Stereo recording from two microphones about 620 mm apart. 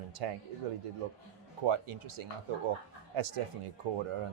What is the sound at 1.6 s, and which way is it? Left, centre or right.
Speech, right.